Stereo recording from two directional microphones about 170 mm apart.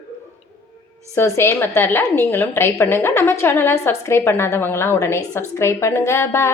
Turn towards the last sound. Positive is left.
turn(degrees=15)  # may be behind; listen again after turning